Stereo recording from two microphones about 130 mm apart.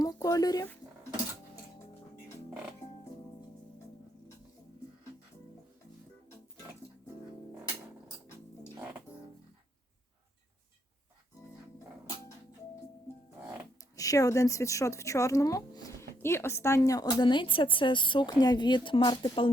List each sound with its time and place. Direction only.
0.0 s zipper: 25° left (ahead or behind)
13.9 s speech: 25° left (ahead or behind)